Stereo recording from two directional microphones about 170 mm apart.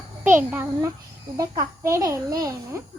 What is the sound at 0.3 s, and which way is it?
A child's voice, 10° right (ahead or behind).